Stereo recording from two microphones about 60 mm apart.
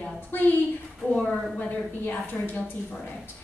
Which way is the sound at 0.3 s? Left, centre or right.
Left.